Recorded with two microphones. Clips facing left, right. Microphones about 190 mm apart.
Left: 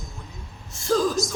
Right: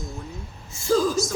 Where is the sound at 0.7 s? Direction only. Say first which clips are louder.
Right 1 dB; centre (ahead or behind).